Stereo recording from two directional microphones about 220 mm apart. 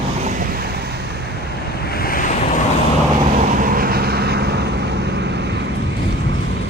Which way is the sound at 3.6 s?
40° right (ahead or behind).